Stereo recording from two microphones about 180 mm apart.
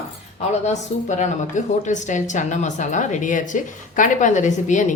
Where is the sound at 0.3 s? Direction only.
40° left (ahead or behind).